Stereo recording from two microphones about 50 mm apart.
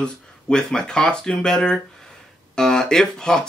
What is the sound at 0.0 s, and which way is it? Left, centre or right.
Speech, centre.